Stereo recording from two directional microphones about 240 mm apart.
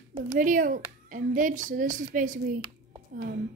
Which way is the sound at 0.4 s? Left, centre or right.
Right.